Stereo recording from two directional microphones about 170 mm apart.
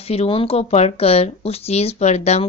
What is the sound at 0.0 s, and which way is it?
Speech, 35° left (ahead or behind).